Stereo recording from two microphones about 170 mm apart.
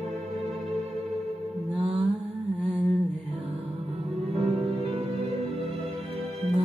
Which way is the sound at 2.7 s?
35° right (ahead or behind).